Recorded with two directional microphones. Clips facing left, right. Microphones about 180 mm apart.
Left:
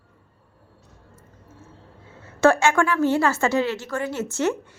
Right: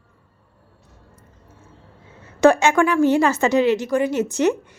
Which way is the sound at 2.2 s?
15° right (ahead or behind).